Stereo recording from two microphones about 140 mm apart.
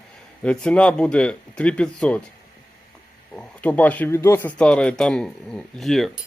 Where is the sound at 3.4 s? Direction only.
10° left (ahead or behind).